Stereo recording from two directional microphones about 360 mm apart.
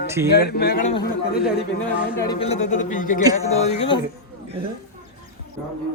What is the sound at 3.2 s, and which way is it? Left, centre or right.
Speech, centre.